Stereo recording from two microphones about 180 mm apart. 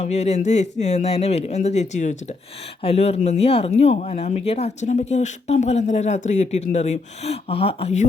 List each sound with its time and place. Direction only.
0.0 s speech: 40° left (ahead or behind)